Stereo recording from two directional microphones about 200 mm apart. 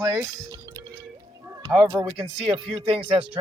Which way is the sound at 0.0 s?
15° right (ahead or behind).